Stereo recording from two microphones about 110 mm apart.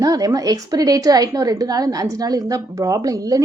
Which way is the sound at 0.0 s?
35° right (ahead or behind).